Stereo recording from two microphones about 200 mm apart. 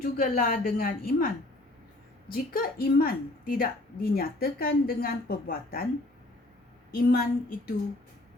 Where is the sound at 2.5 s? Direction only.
45° left (ahead or behind).